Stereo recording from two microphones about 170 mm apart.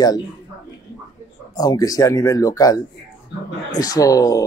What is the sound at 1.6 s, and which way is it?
A man's voice, 20° left (ahead or behind).